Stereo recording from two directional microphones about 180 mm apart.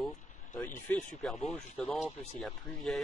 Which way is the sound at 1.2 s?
Centre (ahead or behind).